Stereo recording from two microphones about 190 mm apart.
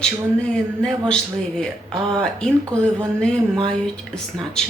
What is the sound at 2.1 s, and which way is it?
Speech, 5° left (ahead or behind).